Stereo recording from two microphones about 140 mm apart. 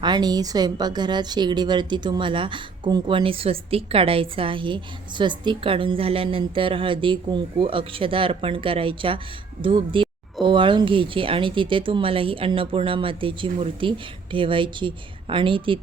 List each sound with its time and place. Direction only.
0.0 s speech: 30° right (ahead or behind)